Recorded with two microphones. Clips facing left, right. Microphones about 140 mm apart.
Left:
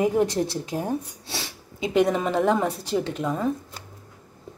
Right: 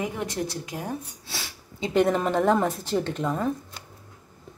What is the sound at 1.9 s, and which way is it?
A woman's voice, centre (ahead or behind).